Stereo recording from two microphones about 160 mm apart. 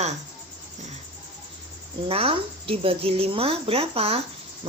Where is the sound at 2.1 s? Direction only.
35° right (ahead or behind).